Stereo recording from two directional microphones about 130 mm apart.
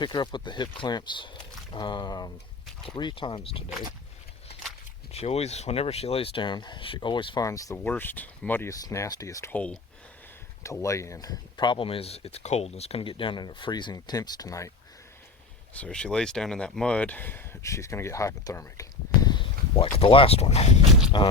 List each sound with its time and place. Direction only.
0.0 s speech: 35° left (ahead or behind)
5.1 s speech: 50° left (ahead or behind)
7.4 s speech: 25° left (ahead or behind)
7.9 s speech: 15° left (ahead or behind)
8.7 s speech: 25° left (ahead or behind)
9.5 s speech: 10° left (ahead or behind)
10.6 s speech: 25° left (ahead or behind)
15.7 s speech: 10° left (ahead or behind); by 19.5 s 30° left (ahead or behind)
19.7 s speech: 45° left (ahead or behind)
21.1 s speech: 35° left (ahead or behind)